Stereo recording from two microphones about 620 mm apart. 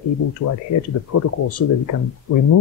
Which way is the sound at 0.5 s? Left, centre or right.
Left.